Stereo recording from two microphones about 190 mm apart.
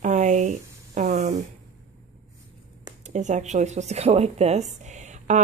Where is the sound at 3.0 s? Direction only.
40° right (ahead or behind).